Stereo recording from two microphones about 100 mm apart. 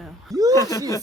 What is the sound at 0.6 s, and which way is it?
Speech, 35° left (ahead or behind).